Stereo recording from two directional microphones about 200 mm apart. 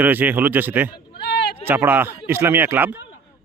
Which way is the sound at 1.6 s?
10° right (ahead or behind).